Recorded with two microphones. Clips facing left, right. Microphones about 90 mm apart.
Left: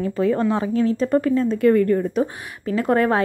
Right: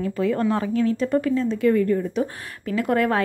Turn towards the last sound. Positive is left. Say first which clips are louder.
# left 2 dB
turn(degrees=30)  # may be behind; listen again after turning